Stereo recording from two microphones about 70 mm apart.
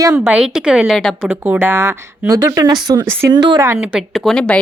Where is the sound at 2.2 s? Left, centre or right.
Right.